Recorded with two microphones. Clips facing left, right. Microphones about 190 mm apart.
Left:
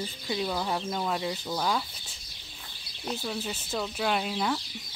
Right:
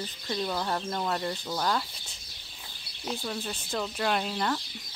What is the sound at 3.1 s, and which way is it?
Speech, 5° left (ahead or behind).